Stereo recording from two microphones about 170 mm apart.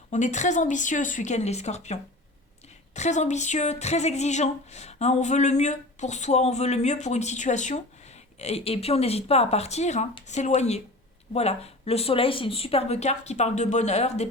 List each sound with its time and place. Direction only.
0.1 s speech: 45° left (ahead or behind)